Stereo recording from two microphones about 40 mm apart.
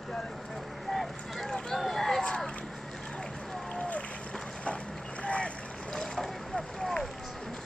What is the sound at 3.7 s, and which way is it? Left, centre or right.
Run, left.